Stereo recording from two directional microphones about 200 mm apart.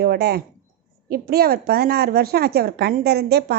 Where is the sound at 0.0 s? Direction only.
50° right (ahead or behind).